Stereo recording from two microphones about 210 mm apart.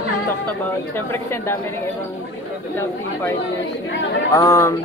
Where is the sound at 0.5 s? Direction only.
10° left (ahead or behind).